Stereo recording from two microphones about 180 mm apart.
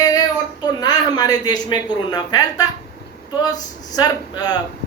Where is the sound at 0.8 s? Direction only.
20° left (ahead or behind).